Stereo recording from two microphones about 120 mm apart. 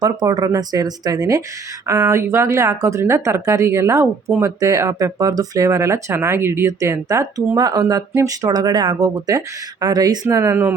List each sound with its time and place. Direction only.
0.0 s speech: 30° right (ahead or behind)